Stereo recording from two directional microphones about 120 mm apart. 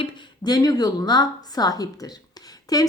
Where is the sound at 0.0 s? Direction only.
35° left (ahead or behind).